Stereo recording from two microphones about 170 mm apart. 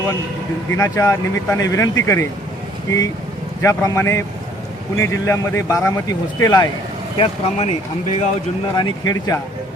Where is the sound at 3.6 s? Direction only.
15° left (ahead or behind).